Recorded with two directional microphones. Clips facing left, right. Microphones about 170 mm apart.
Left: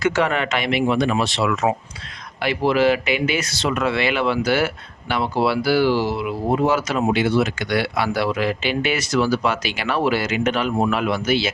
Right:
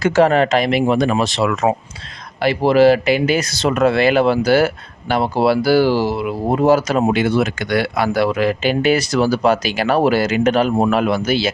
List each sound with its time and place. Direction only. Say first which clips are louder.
0.0 s speech: right 7 dB; 35° right (ahead or behind)